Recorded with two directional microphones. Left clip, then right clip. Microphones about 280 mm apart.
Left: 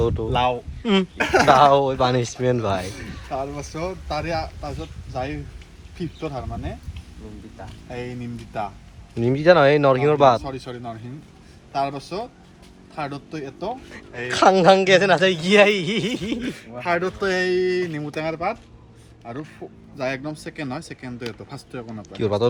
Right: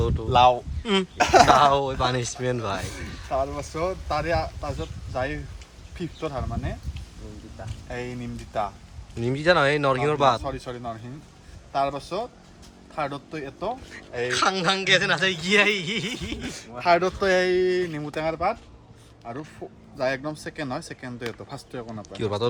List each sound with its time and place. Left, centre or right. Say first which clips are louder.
0.0 s speech: left 6 dB; centre
0.3 s speech: right 7 dB; centre
0.8 s speech: left 3 dB; centre
1.2 s speech: right 4 dB; centre
1.5 s speech: left 4 dB; centre
7.9 s speech: left 1 dB; centre
9.1 s speech: left 5 dB; centre
16.8 s speech: right 3 dB; right
17.2 s speech: left 1 dB; centre